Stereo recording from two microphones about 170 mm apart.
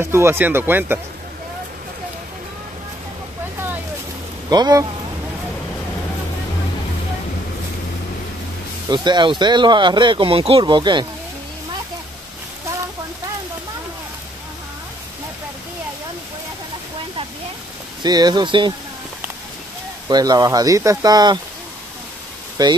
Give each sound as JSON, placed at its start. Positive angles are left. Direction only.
{"t": 0.0, "sound": "speech", "side_deg": -15}
{"t": 4.5, "sound": "speech", "side_deg": -25}
{"t": 8.8, "sound": "speech", "side_deg": -25}
{"t": 18.0, "sound": "speech", "side_deg": -25}
{"t": 20.1, "sound": "speech", "side_deg": -25}
{"t": 22.6, "sound": "speech", "side_deg": -25}